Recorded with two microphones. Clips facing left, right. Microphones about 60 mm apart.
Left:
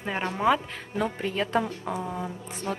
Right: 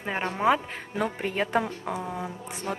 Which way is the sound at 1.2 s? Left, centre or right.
Right.